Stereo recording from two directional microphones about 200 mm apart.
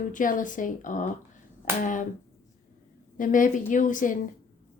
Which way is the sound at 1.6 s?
40° left (ahead or behind).